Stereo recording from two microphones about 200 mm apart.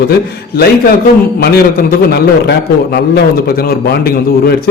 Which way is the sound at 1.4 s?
50° left (ahead or behind).